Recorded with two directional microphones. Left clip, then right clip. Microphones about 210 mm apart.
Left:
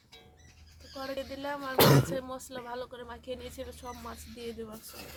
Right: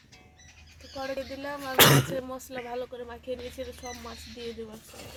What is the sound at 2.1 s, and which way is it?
Speech, 20° right (ahead or behind).